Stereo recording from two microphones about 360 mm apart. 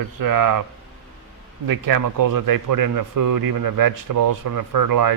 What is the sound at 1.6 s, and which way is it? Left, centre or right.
Speech, right.